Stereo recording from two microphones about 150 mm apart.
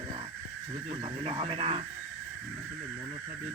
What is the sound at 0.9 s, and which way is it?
Speech, 35° right (ahead or behind).